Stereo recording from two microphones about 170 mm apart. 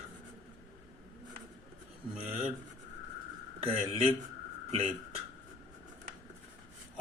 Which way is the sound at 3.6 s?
35° right (ahead or behind).